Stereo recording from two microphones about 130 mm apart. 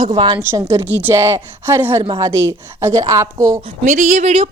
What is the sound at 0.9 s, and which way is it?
Speech, 15° right (ahead or behind).